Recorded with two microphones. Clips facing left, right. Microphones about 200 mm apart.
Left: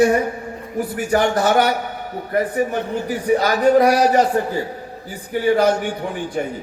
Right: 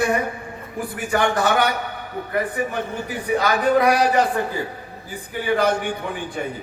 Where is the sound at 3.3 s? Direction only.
40° left (ahead or behind).